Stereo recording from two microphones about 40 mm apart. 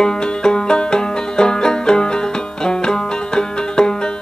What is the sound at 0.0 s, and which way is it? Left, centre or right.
Banjo, left.